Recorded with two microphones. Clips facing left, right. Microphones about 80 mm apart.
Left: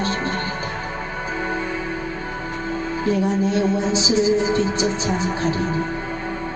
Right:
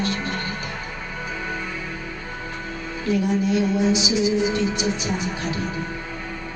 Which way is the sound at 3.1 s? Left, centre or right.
Left.